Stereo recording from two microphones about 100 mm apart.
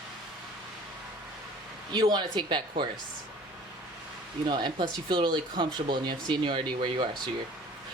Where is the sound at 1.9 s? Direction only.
45° right (ahead or behind).